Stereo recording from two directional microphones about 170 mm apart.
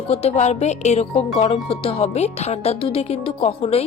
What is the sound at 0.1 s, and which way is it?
Speech, 35° left (ahead or behind).